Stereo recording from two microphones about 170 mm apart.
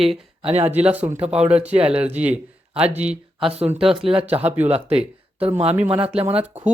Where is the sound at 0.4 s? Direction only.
35° right (ahead or behind).